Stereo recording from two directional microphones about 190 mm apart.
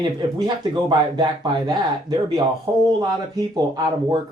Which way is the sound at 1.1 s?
25° right (ahead or behind).